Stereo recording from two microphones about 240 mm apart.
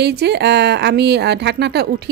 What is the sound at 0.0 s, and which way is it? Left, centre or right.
Speech, right.